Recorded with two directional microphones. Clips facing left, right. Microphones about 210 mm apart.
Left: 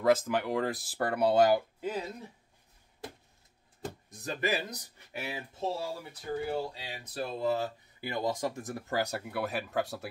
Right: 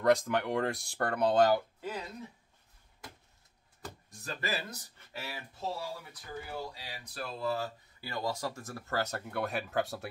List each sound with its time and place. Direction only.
0.0 s speech: 5° left (ahead or behind); by 2.0 s 20° left (ahead or behind)
3.8 s speech: 20° left (ahead or behind); by 10.0 s centre (ahead or behind)